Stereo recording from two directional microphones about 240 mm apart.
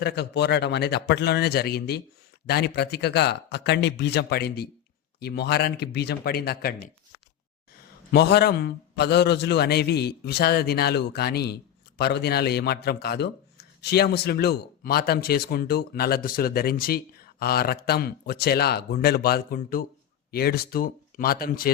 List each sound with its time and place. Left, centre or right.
0.0 s speech: left
8.1 s a man's voice: left